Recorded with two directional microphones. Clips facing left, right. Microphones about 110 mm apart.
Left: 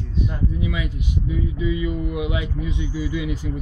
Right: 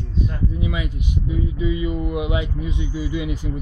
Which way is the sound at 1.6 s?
25° right (ahead or behind).